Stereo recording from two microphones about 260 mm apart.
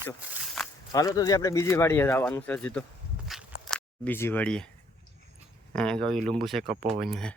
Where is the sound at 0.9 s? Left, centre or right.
Centre.